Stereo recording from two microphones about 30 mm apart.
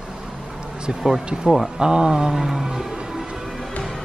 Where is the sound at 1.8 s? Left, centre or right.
Right.